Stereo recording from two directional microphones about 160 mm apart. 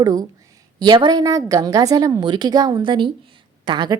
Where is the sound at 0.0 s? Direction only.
25° right (ahead or behind).